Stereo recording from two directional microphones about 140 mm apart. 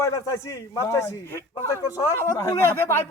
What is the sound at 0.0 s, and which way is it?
A man's voice, 20° left (ahead or behind).